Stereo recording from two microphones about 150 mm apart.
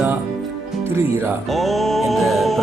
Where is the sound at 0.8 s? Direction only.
15° right (ahead or behind).